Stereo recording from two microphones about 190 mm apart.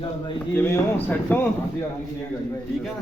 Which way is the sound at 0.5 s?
10° left (ahead or behind).